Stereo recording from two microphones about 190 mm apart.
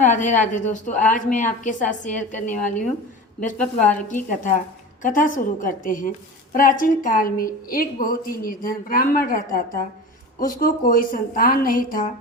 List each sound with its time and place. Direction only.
0.0 s a woman's voice: 40° left (ahead or behind)
5.0 s a woman's voice: 45° left (ahead or behind)